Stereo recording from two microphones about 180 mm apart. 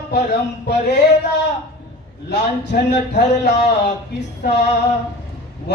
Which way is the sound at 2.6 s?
70° left (ahead or behind).